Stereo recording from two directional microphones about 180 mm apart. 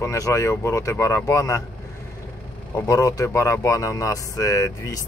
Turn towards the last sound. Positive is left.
turn(degrees=15)  # may be behind; listen again after turning